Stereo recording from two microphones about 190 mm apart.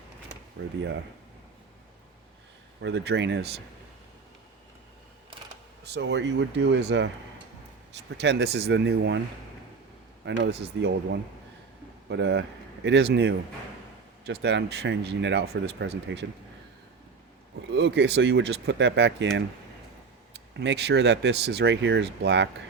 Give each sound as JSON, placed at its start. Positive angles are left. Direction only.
{"t": 0.6, "sound": "speech", "side_deg": -75}
{"t": 2.8, "sound": "speech", "side_deg": -65}
{"t": 5.8, "sound": "speech", "side_deg": -60}
{"t": 8.2, "sound": "speech", "side_deg": -65}
{"t": 10.2, "sound": "a man's voice", "side_deg": -70}
{"t": 17.7, "sound": "speech", "side_deg": -65}
{"t": 20.5, "sound": "speech", "side_deg": -65}